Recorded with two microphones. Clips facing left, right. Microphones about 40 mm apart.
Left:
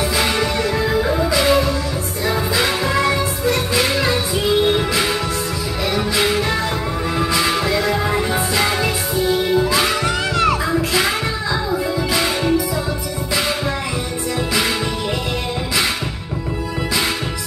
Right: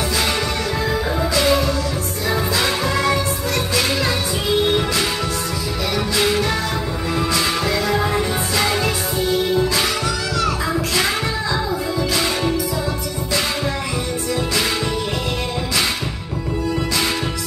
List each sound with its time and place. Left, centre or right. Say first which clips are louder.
0.8 s music: left 2 dB; centre
10.0 s music: left 3 dB; left
11.7 s music: left 2 dB; centre